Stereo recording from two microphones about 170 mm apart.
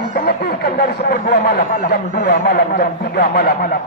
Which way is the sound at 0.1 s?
70° left (ahead or behind).